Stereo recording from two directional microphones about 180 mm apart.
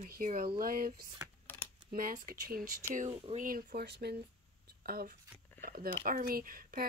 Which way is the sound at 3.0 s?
40° right (ahead or behind).